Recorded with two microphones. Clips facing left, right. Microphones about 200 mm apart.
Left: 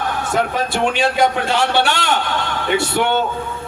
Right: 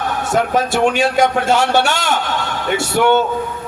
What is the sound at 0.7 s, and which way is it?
A man's voice, 45° right (ahead or behind).